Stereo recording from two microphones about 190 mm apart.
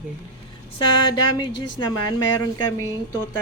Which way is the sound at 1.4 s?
25° left (ahead or behind).